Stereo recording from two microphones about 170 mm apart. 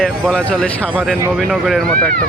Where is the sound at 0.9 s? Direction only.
5° right (ahead or behind).